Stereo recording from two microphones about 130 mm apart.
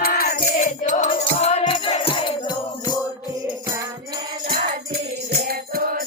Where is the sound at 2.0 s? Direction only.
40° left (ahead or behind).